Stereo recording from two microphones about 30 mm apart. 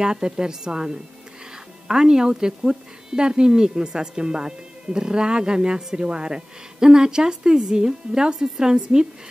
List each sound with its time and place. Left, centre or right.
0.0 s speech: right